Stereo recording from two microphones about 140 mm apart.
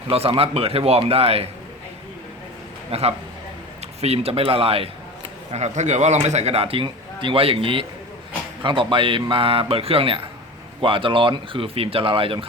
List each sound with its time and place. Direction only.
0.1 s a man's voice: 45° right (ahead or behind)
2.9 s a man's voice: 45° right (ahead or behind)